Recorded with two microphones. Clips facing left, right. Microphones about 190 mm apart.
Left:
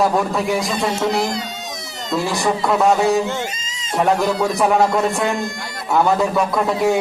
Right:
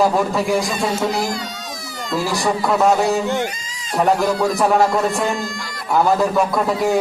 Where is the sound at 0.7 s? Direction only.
20° left (ahead or behind).